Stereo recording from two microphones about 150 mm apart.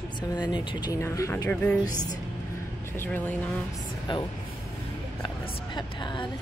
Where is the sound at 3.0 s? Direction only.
10° left (ahead or behind).